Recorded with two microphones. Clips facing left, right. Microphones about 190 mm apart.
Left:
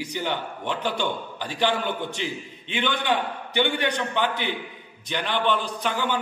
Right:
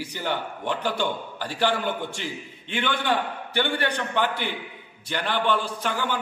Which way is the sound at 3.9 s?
10° right (ahead or behind).